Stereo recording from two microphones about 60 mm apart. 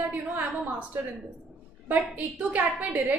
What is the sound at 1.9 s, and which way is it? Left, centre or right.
Speech, right.